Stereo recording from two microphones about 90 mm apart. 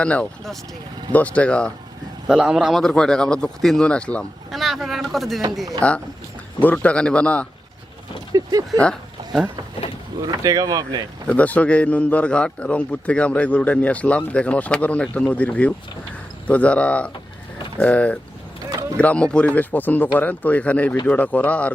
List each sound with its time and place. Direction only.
0.0 s a man's voice: 15° left (ahead or behind)
2.2 s a man's voice: 5° right (ahead or behind); by 4.3 s 10° left (ahead or behind)
4.5 s speech: centre (ahead or behind)
5.8 s a man's voice: 10° left (ahead or behind)
8.3 s a sound: 50° right (ahead or behind)
10.2 s speech: 45° right (ahead or behind)
11.3 s a man's voice: 15° left (ahead or behind)
18.7 s vehicle: 40° right (ahead or behind)
18.9 s a man's voice: 15° left (ahead or behind)